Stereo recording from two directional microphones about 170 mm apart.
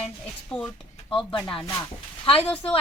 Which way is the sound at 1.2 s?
25° left (ahead or behind).